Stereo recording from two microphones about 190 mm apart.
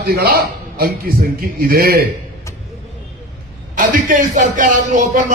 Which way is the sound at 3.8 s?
45° right (ahead or behind).